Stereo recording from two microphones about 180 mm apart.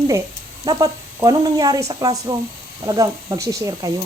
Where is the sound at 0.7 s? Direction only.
20° right (ahead or behind).